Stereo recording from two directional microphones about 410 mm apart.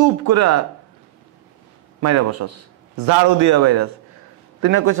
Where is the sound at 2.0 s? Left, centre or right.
Right.